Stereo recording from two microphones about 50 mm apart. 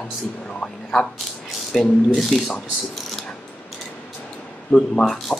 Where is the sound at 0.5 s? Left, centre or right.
Centre.